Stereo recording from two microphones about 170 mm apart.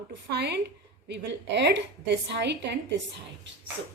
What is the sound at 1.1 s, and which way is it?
A woman's voice, 90° right.